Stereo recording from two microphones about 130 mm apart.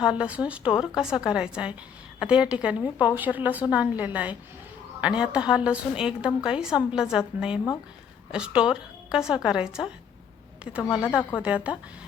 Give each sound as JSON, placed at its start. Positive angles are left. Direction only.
{"t": 0.0, "sound": "a woman's voice", "side_deg": -5}
{"t": 11.2, "sound": "speech", "side_deg": 15}
{"t": 11.4, "sound": "a woman's voice", "side_deg": -10}